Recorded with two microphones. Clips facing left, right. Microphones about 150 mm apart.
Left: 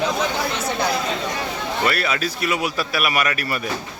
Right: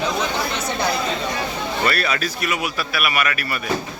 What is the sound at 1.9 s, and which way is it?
Speech, 20° left (ahead or behind).